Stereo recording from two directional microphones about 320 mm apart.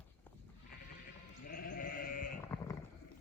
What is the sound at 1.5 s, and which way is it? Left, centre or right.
Sheep, left.